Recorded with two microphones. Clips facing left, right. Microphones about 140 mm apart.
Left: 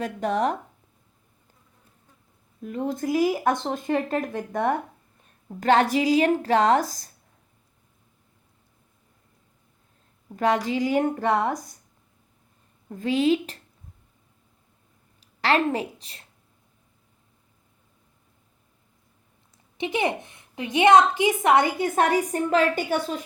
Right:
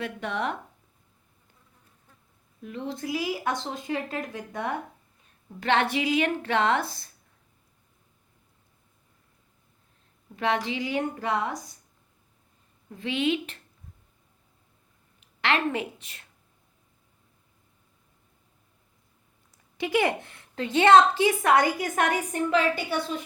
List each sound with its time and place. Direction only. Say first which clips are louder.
0.0 s a woman's voice: left 6 dB; 40° left (ahead or behind)
2.6 s a woman's voice: left 6 dB; 45° left (ahead or behind)
10.3 s speech: left 4 dB; 40° left (ahead or behind)
12.9 s a woman's voice: left 5 dB; 40° left (ahead or behind)
15.2 s a woman's voice: left 4 dB; 35° left (ahead or behind)
19.7 s a woman's voice: right 1 dB; 20° left (ahead or behind); by 23.2 s 45° left (ahead or behind)